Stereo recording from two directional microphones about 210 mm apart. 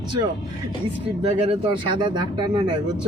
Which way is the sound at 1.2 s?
25° right (ahead or behind).